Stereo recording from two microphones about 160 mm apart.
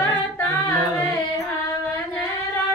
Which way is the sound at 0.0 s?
10° left (ahead or behind).